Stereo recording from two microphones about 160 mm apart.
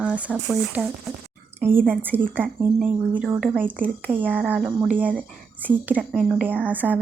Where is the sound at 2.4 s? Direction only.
10° right (ahead or behind).